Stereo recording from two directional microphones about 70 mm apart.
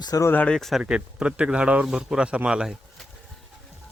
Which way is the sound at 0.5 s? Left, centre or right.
Centre.